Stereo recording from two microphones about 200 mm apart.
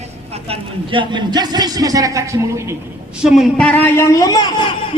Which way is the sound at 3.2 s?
Centre (ahead or behind).